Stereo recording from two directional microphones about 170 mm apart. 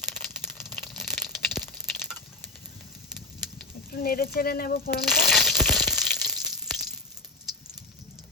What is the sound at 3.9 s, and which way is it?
Speech, 60° left (ahead or behind).